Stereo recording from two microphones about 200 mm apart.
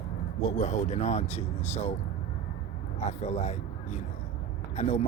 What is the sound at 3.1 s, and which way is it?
Speech, 35° left (ahead or behind).